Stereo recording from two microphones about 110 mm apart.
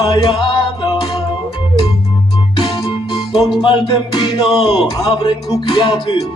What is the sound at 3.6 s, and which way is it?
Speech, 40° left (ahead or behind).